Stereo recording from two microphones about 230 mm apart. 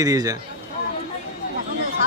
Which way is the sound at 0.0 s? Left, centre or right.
Centre.